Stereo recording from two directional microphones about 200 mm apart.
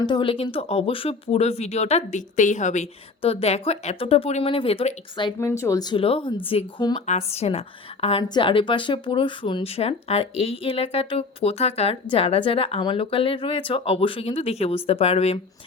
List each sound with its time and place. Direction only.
0.0 s speech: 25° left (ahead or behind)